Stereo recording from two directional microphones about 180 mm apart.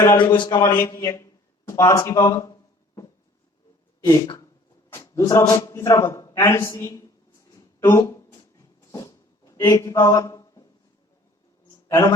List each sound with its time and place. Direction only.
0.0 s a man's voice: 20° left (ahead or behind)
7.8 s a sound: 15° left (ahead or behind)
11.9 s a man's voice: 15° left (ahead or behind)